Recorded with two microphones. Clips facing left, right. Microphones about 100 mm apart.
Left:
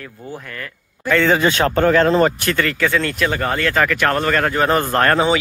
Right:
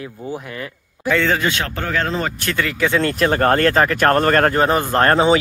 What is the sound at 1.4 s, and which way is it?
Speech, 35° left (ahead or behind).